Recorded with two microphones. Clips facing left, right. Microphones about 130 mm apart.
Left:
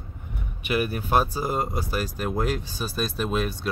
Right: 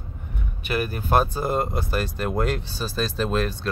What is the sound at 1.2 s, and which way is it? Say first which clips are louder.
Speech: right 2 dB; 5° left (ahead or behind).